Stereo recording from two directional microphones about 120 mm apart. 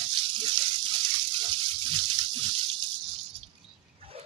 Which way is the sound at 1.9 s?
40° right (ahead or behind).